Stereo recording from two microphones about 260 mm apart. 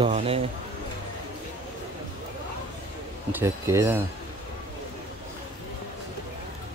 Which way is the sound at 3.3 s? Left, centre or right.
Centre.